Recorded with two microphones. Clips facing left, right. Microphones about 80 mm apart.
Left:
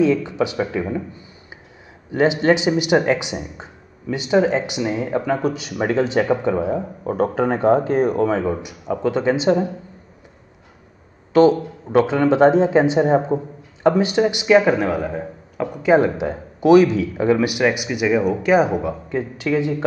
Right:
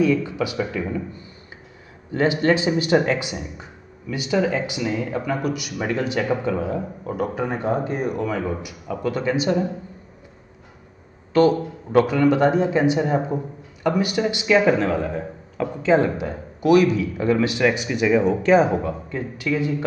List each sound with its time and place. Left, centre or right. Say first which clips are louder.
0.0 s speech: left 2 dB; left
11.3 s speech: left 3 dB; left
18.8 s speech: left 3 dB; left